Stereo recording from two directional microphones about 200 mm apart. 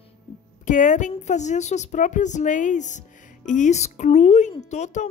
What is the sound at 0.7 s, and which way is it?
A woman's voice, 40° left (ahead or behind).